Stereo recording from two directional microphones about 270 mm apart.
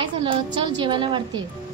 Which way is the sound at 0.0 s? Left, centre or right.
Centre.